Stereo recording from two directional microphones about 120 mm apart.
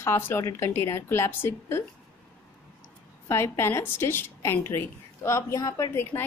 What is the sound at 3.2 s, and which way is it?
A woman's voice, 20° left (ahead or behind).